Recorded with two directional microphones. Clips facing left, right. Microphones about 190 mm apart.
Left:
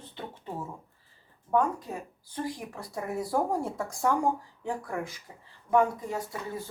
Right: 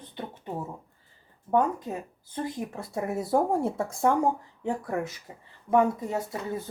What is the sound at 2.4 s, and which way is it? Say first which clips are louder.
Speech: right 3 dB; 20° right (ahead or behind).